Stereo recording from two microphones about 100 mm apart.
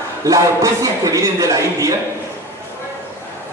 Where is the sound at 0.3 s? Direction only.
35° right (ahead or behind).